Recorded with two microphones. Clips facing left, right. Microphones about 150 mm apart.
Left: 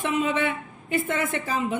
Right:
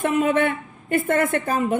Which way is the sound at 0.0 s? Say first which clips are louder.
Right 5 dB; 50° right (ahead or behind).